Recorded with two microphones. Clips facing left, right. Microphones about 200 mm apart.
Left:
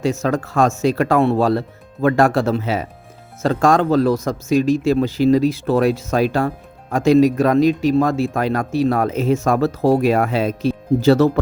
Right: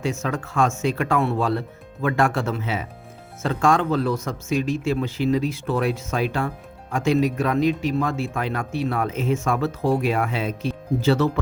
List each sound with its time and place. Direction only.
0.0 s speech: 35° left (ahead or behind)